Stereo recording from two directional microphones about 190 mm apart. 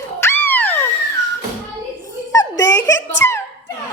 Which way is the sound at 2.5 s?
15° left (ahead or behind).